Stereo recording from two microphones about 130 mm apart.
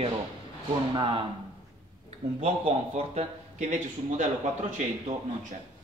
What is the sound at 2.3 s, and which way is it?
A man's voice, 55° right (ahead or behind).